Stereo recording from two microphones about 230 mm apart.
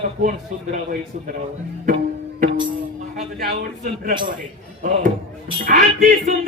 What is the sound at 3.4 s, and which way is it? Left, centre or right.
Speech, right.